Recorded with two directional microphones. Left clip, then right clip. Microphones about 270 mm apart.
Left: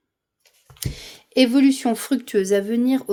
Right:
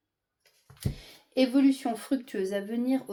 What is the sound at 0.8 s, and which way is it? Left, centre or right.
Speech, left.